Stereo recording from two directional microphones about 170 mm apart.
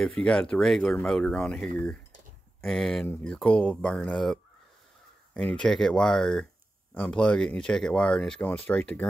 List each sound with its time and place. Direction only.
0.0 s speech: 5° left (ahead or behind)